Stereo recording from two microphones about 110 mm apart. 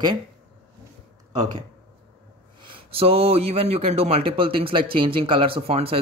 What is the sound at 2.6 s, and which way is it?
Speech, 55° right (ahead or behind).